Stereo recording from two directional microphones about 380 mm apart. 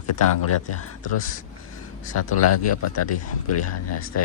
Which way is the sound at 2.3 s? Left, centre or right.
Left.